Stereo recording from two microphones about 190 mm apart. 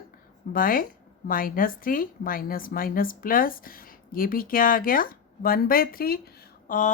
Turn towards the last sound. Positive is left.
turn(degrees=45)  # may be behind; listen again after turning